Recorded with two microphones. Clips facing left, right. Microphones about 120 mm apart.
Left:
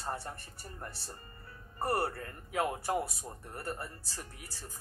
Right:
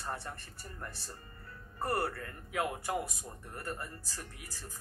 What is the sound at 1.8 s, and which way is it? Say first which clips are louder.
Speech: left 1 dB; 25° left (ahead or behind).